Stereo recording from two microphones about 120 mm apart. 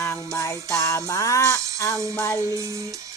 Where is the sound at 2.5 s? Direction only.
25° right (ahead or behind).